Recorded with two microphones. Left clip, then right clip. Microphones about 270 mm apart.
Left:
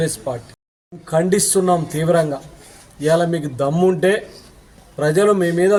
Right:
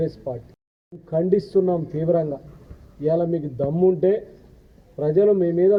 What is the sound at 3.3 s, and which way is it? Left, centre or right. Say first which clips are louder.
Speech: left 4 dB; right.